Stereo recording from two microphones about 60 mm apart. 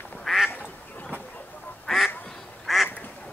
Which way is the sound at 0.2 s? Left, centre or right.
Centre.